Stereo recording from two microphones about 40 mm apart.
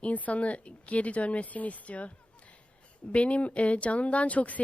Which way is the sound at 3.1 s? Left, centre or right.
Left.